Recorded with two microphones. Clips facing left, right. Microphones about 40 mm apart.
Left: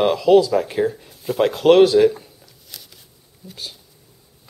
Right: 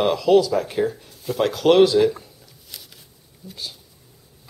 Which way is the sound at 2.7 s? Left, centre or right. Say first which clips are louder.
Even; centre.